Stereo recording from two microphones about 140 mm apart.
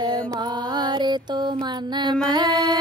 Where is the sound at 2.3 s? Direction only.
30° right (ahead or behind).